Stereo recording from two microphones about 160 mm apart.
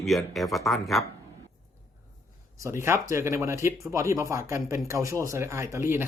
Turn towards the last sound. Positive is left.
turn(degrees=-15)  # may be behind; listen again after turning